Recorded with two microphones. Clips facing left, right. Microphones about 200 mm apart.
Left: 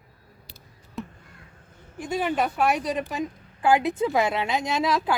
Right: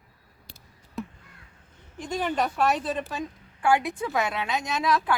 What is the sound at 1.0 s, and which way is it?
Crow, centre (ahead or behind).